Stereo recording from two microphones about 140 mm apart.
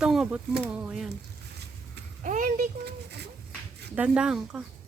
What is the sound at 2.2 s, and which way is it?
Speech, 65° right (ahead or behind).